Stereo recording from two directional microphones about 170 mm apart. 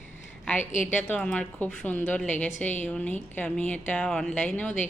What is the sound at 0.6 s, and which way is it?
Speech, 45° left (ahead or behind).